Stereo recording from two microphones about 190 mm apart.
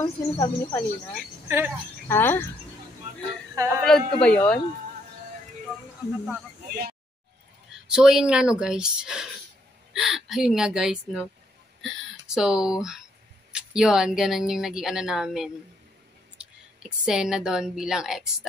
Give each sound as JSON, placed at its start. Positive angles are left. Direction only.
{"t": 0.0, "sound": "speech", "side_deg": 15}
{"t": 1.5, "sound": "speech", "side_deg": -10}
{"t": 2.0, "sound": "speech", "side_deg": 10}
{"t": 3.5, "sound": "speech", "side_deg": -15}
{"t": 3.8, "sound": "speech", "side_deg": 5}
{"t": 6.7, "sound": "a sound", "side_deg": -55}
{"t": 7.9, "sound": "speech", "side_deg": -5}